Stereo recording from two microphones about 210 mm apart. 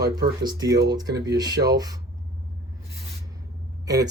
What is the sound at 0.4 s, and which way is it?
A man's voice, 20° right (ahead or behind).